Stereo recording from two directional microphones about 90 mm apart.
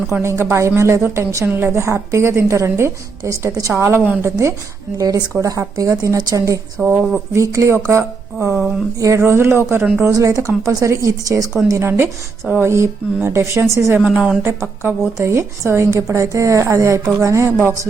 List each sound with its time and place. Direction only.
0.2 s a woman's voice: 30° right (ahead or behind)
4.9 s a woman's voice: 45° right (ahead or behind)
6.8 s speech: 25° right (ahead or behind)
7.3 s a woman's voice: 35° right (ahead or behind)
14.0 s a woman's voice: 10° right (ahead or behind)
14.4 s a woman's voice: 30° right (ahead or behind)